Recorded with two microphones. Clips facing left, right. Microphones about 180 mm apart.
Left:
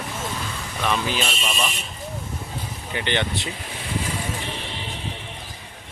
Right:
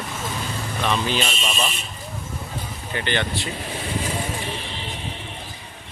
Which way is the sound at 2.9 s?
20° left (ahead or behind).